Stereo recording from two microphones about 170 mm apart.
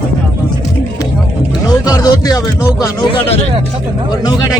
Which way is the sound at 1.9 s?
20° left (ahead or behind).